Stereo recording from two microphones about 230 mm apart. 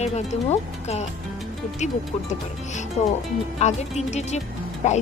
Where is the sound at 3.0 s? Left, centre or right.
Left.